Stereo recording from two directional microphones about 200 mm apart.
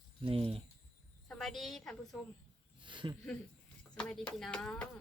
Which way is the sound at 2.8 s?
25° right (ahead or behind).